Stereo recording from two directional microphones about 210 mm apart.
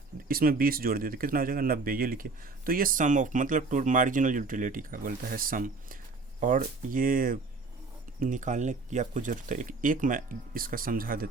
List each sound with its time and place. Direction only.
0.3 s speech: 45° right (ahead or behind)